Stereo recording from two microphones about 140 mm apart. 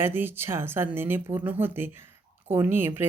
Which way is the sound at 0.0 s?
15° right (ahead or behind).